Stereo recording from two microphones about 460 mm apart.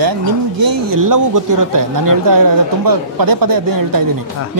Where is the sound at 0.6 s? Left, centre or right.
Right.